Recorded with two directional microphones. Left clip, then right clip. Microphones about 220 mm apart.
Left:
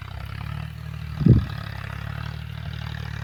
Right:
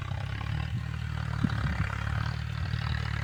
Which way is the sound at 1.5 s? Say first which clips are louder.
Right 1 dB; 40° left (ahead or behind).